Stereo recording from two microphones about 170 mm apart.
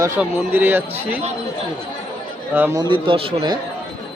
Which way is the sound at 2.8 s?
30° right (ahead or behind).